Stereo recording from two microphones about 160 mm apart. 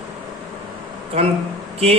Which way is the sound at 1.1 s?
40° right (ahead or behind).